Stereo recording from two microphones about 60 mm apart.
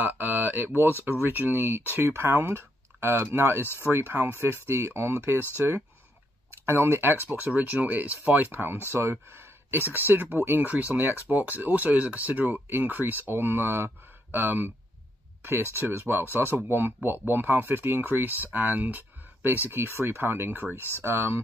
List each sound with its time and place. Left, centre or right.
0.0 s a sound: right
1.2 s speech: right
3.6 s speech: left
3.9 s speech: right
6.6 s speech: right